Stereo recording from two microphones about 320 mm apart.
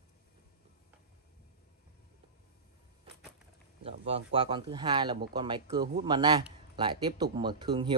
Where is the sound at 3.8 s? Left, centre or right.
Centre.